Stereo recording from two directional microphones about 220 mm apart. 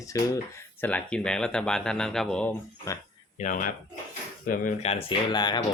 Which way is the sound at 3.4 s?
35° left (ahead or behind).